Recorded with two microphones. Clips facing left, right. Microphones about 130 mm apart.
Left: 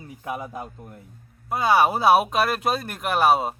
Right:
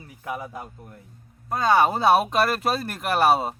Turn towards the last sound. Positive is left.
turn(degrees=0)  # may be behind; listen again after turning